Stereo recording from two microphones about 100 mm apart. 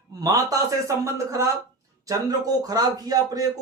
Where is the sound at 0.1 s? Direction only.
35° right (ahead or behind).